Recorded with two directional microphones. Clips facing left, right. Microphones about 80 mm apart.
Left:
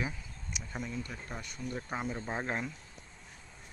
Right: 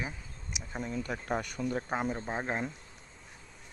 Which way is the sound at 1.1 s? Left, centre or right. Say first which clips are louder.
Right 10 dB; right.